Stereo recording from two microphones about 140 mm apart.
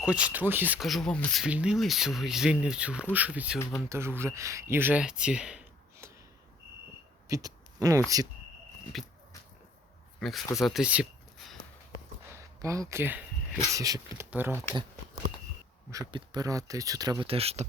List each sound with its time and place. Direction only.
0.0 s speech: 10° right (ahead or behind)
0.8 s speech: centre (ahead or behind)
1.5 s speech: 10° right (ahead or behind)
7.3 s a sound: 25° right (ahead or behind)
8.9 s speech: centre (ahead or behind)
10.2 s speech: centre (ahead or behind)
12.4 s a sound: 20° right (ahead or behind)
13.7 s speech: 25° right (ahead or behind)
16.1 s speech: 30° right (ahead or behind)
17.2 s speech: 45° right (ahead or behind)